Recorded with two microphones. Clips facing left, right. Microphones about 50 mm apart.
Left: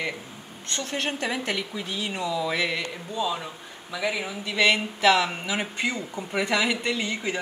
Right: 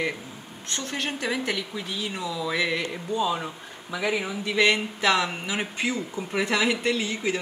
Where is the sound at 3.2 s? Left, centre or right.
Centre.